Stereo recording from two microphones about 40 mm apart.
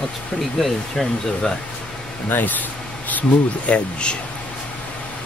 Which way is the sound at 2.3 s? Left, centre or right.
Left.